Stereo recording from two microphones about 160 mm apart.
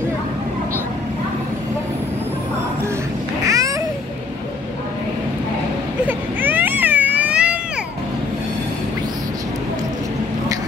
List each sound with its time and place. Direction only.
3.4 s babbling: 20° right (ahead or behind)
6.0 s baby cry: 10° right (ahead or behind)